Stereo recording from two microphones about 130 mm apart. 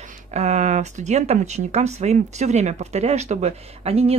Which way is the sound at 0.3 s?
65° right (ahead or behind).